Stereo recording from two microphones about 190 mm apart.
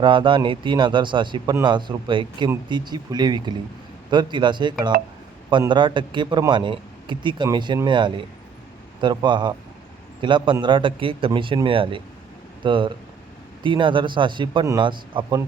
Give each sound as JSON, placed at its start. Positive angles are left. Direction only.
{"t": 0.0, "sound": "a man's voice", "side_deg": -25}